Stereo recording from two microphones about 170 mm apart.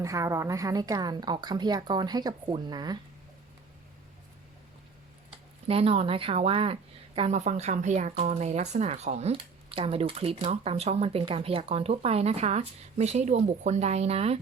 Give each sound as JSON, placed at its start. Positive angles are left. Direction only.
{"t": 0.0, "sound": "a woman's voice", "side_deg": -20}
{"t": 5.6, "sound": "speech", "side_deg": -35}